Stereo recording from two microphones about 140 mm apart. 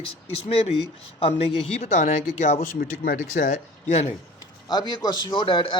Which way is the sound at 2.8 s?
65° left (ahead or behind).